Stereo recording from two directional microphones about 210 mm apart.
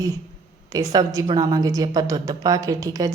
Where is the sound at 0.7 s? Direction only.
15° right (ahead or behind).